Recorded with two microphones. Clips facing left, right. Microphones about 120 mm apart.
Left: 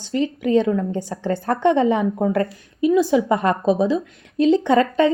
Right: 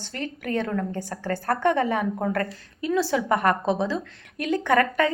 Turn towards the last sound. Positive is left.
turn(degrees=20)  # may be behind; listen again after turning